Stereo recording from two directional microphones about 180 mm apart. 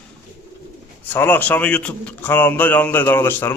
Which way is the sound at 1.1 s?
10° left (ahead or behind).